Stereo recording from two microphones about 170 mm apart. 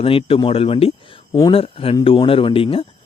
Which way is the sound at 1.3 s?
25° left (ahead or behind).